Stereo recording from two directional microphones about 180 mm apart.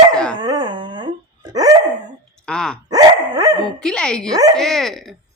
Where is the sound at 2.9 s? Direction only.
20° right (ahead or behind).